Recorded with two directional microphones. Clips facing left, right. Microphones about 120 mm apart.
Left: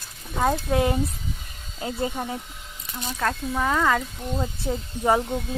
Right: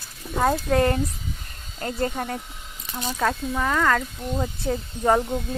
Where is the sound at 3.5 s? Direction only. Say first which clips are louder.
Left 2 dB; 10° left (ahead or behind).